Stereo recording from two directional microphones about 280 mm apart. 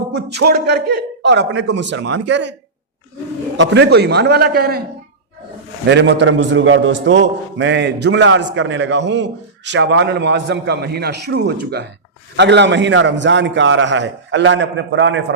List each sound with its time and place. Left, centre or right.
0.1 s a man's voice: right
3.6 s a man's voice: right
5.9 s a man's voice: right